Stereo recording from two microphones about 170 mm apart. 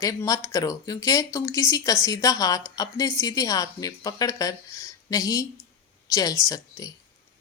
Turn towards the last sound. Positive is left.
turn(degrees=20)  # may be behind; listen again after turning